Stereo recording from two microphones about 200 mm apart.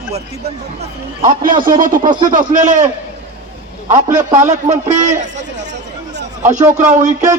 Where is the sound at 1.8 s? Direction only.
40° right (ahead or behind).